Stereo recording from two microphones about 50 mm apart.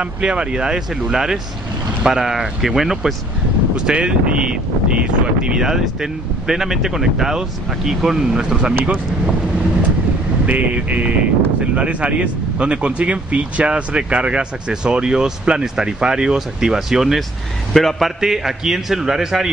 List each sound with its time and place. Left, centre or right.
0.0 s speech: centre
3.7 s speech: centre
5.6 s speech: centre
10.4 s speech: right; by 17.2 s centre
17.7 s a man's voice: centre
18.2 s speech: centre